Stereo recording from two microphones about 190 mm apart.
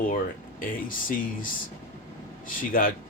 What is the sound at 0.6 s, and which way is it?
Speech, 45° left (ahead or behind).